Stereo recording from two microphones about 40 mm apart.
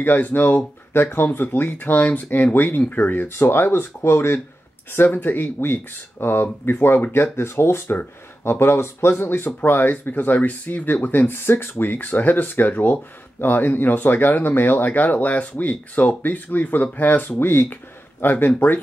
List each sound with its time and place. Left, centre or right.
0.0 s speech: left
1.1 s speech: left
3.3 s speech: left
4.9 s speech: left
7.3 s speech: left
9.2 s speech: left
11.1 s speech: left